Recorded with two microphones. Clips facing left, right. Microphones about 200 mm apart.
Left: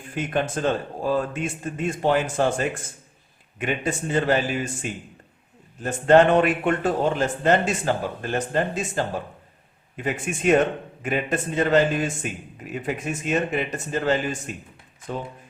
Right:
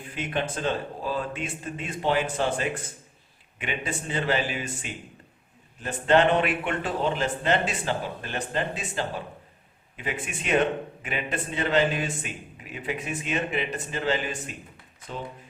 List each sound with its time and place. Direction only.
0.1 s a man's voice: 45° left (ahead or behind)